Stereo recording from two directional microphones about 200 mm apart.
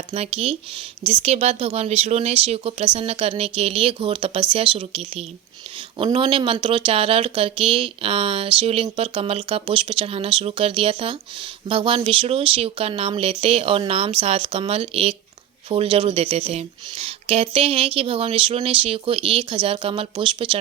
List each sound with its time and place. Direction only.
0.1 s speech: 30° right (ahead or behind)